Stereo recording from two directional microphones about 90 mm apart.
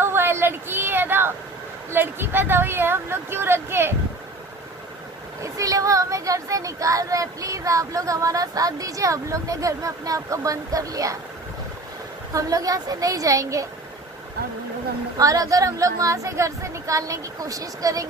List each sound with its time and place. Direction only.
0.0 s a sound: 25° right (ahead or behind)
1.9 s speech: 25° right (ahead or behind)
5.4 s speech: 40° right (ahead or behind)
12.4 s speech: 40° right (ahead or behind)
15.1 s speech: 40° right (ahead or behind)